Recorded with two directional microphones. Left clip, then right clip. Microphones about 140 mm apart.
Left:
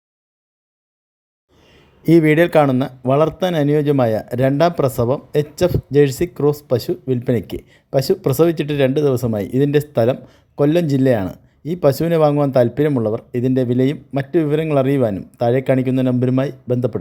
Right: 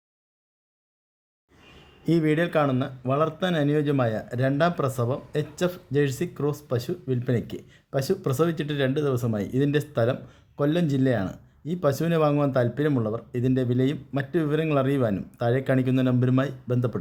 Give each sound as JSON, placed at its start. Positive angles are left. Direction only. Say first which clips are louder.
{"t": 2.0, "sound": "a man's voice", "louder": "left 11 dB", "side_deg": 50}